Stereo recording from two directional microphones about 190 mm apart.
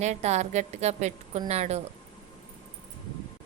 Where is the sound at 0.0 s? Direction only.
35° right (ahead or behind).